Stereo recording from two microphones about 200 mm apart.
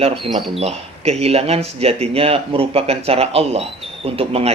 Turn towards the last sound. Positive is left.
turn(degrees=-30)  # may be behind; listen again after turning